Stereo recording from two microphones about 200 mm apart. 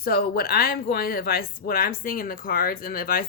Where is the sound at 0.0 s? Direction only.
50° left (ahead or behind).